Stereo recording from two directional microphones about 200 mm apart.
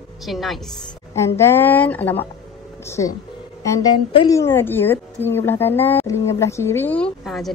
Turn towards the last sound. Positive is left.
turn(degrees=0)  # may be behind; listen again after turning